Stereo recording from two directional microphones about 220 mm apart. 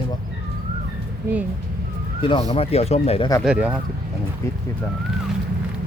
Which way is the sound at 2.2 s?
20° left (ahead or behind).